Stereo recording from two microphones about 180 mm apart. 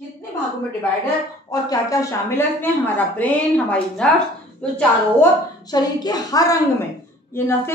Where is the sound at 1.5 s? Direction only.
20° left (ahead or behind).